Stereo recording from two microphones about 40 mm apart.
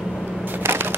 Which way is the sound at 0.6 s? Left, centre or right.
Right.